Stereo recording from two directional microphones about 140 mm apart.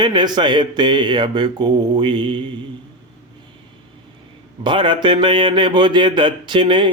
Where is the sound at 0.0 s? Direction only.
30° right (ahead or behind).